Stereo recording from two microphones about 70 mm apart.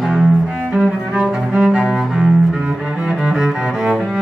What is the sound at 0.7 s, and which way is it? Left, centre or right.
Cello, centre.